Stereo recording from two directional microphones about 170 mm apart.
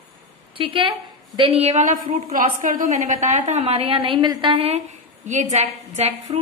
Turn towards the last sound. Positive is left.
turn(degrees=-40)  # may be behind; listen again after turning